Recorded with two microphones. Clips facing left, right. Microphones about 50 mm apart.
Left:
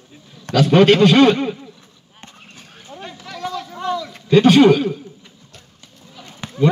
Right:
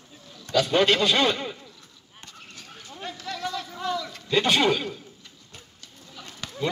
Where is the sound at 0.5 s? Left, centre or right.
Left.